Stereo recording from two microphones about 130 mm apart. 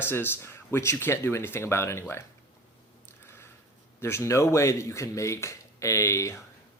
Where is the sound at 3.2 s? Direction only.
20° left (ahead or behind).